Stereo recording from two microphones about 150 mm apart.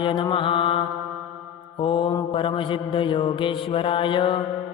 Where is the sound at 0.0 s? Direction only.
35° left (ahead or behind).